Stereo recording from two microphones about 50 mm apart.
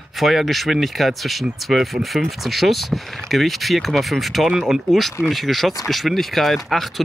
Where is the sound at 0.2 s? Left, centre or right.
Centre.